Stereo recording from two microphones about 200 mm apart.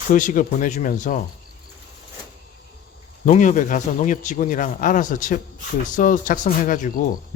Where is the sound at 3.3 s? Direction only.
40° left (ahead or behind).